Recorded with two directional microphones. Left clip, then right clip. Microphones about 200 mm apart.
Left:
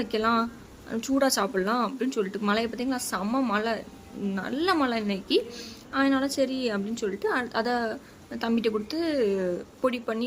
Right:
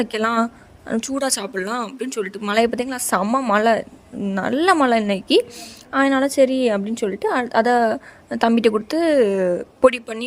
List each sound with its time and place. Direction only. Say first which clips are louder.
0.0 s speech: right 5 dB; 40° right (ahead or behind)